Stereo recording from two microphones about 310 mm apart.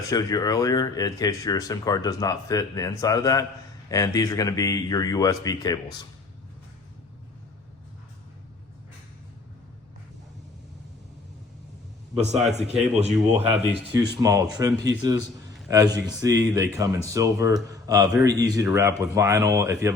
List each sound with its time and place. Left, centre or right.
0.1 s speech: centre
12.1 s a man's voice: right